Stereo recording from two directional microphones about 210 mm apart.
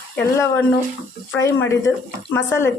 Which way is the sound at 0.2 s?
10° left (ahead or behind).